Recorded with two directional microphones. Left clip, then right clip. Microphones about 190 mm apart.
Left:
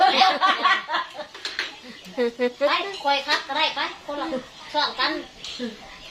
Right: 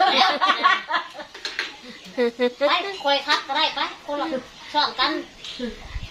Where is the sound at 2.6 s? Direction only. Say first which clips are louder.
Right 1 dB; 25° right (ahead or behind).